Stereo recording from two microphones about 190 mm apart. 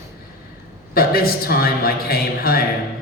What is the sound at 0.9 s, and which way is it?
A man's voice, 50° left (ahead or behind).